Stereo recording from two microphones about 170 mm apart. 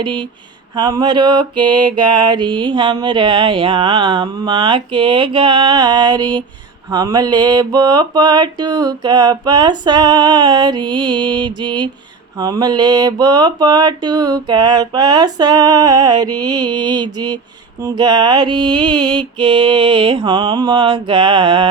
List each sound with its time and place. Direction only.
0.0 s mantra: 30° right (ahead or behind)